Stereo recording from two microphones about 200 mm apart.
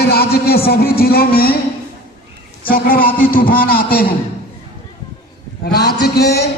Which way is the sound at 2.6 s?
45° left (ahead or behind).